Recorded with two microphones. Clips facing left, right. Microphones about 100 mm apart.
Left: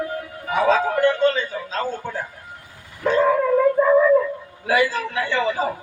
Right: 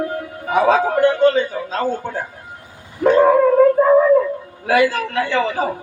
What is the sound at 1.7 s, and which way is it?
Speech, 20° right (ahead or behind).